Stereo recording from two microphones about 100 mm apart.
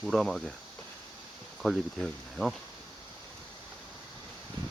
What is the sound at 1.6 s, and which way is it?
Speech, centre (ahead or behind).